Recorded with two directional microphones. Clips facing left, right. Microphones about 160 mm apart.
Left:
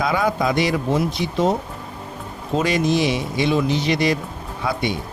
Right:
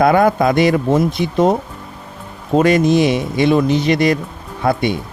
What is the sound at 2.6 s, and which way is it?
Speech, 55° right (ahead or behind).